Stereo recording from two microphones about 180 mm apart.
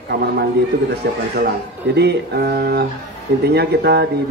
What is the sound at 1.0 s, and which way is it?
Speech, 65° right (ahead or behind).